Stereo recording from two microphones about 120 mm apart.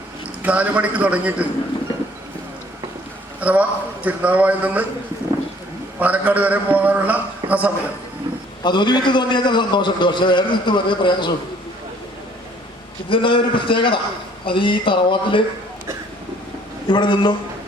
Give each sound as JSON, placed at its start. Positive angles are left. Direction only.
{"t": 0.4, "sound": "a man's voice", "side_deg": -10}
{"t": 3.4, "sound": "a man's voice", "side_deg": -10}
{"t": 6.0, "sound": "a man's voice", "side_deg": -15}
{"t": 8.6, "sound": "a man's voice", "side_deg": 40}
{"t": 13.1, "sound": "speech", "side_deg": 45}
{"t": 16.9, "sound": "a man's voice", "side_deg": 40}